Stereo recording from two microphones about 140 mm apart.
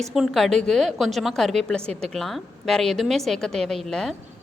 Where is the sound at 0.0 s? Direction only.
Centre (ahead or behind).